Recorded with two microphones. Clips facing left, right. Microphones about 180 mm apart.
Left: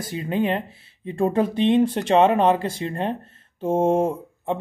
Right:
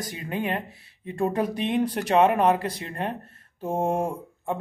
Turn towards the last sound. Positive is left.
turn(degrees=25)  # may be behind; listen again after turning